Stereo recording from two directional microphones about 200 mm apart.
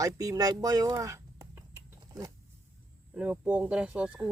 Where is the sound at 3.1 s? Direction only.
5° right (ahead or behind).